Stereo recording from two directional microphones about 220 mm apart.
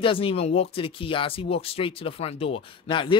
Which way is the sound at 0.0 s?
25° left (ahead or behind).